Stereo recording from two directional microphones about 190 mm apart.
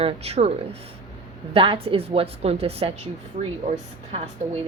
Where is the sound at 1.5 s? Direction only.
30° right (ahead or behind).